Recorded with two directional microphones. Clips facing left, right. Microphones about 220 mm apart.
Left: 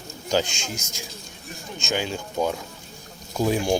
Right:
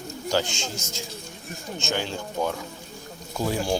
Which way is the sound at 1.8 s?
15° left (ahead or behind).